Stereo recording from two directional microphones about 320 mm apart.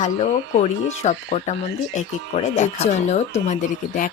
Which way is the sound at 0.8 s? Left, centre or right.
Left.